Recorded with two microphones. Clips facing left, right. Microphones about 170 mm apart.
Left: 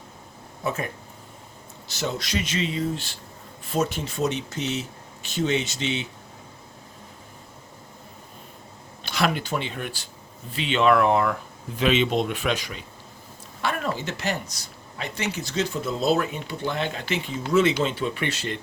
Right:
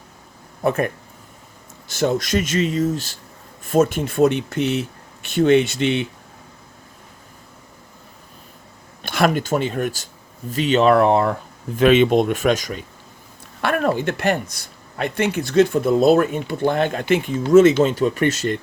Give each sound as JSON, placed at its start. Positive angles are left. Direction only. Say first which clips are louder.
{"t": 0.6, "sound": "speech", "louder": "right 9 dB", "side_deg": -60}
{"t": 1.9, "sound": "speech", "louder": "right 9 dB", "side_deg": -50}
{"t": 9.0, "sound": "speech", "louder": "right 6 dB", "side_deg": -50}
{"t": 11.8, "sound": "speech", "louder": "right 8 dB", "side_deg": -50}
{"t": 13.6, "sound": "speech", "louder": "right 8 dB", "side_deg": -60}